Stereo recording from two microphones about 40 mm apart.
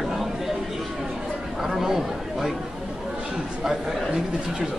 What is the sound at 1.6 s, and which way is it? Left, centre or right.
Speech, centre.